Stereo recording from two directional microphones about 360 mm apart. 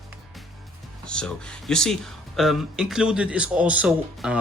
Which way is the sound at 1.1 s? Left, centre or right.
Centre.